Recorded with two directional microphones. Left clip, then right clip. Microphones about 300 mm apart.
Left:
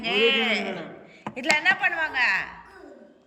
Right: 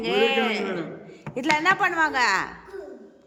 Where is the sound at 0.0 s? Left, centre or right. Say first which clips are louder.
Even; centre.